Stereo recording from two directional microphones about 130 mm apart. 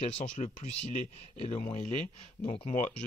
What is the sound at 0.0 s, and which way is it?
Speech, 55° left (ahead or behind).